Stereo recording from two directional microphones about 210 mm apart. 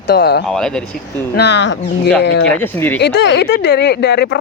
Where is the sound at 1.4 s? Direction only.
55° left (ahead or behind).